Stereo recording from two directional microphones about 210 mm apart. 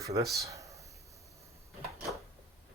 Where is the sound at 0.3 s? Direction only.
15° right (ahead or behind).